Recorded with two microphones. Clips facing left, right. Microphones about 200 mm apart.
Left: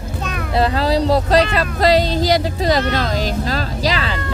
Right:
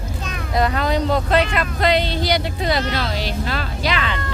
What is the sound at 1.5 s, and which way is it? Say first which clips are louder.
Speech: left 4 dB; 40° left (ahead or behind).